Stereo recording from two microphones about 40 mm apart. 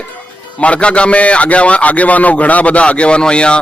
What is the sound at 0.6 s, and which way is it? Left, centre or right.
A man's voice, left.